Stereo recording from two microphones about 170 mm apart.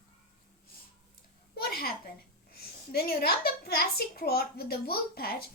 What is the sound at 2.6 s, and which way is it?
A woman's voice, 65° left (ahead or behind).